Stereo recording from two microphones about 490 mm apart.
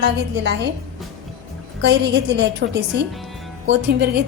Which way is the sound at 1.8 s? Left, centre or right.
Right.